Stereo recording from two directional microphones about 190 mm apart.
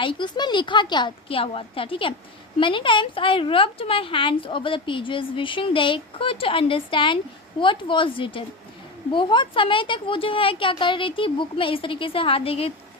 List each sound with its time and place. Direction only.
0.0 s a woman's voice: 25° left (ahead or behind)